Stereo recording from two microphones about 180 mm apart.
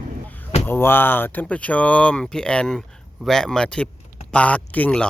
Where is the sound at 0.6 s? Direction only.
10° left (ahead or behind).